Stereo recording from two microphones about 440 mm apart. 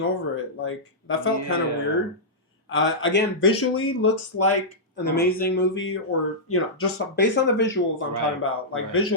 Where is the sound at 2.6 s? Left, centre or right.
Left.